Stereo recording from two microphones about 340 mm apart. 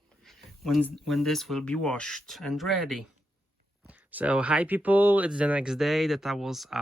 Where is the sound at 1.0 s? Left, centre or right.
Centre.